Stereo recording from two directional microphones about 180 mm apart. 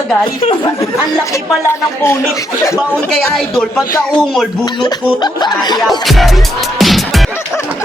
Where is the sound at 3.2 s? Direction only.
5° left (ahead or behind).